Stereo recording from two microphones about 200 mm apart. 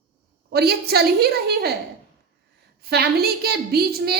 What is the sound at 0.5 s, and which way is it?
A woman's voice, 55° right (ahead or behind).